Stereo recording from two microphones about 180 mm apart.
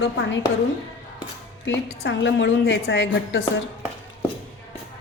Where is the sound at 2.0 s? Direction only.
80° left.